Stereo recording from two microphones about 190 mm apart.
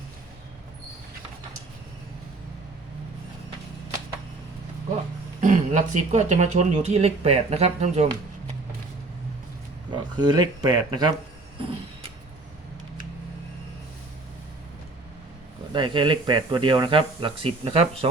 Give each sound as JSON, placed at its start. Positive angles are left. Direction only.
{"t": 5.4, "sound": "speech", "side_deg": -40}
{"t": 9.9, "sound": "speech", "side_deg": -20}
{"t": 15.7, "sound": "speech", "side_deg": -25}